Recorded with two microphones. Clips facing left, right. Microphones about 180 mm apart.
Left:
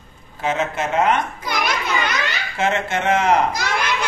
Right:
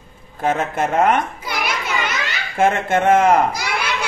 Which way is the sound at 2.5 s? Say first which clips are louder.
Right 5 dB; 50° right (ahead or behind).